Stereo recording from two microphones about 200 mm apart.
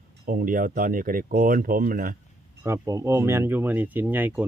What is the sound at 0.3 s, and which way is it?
Speech, 45° right (ahead or behind).